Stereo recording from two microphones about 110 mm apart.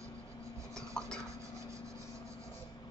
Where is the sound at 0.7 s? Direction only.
5° left (ahead or behind).